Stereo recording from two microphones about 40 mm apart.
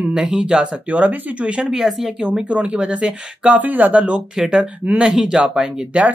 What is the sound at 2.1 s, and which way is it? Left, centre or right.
Speech, centre.